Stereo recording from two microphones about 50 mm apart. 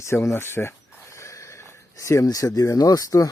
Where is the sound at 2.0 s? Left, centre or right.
Left.